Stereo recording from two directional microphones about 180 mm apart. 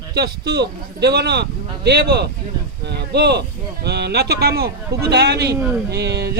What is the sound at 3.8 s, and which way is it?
A man's voice, 65° right (ahead or behind).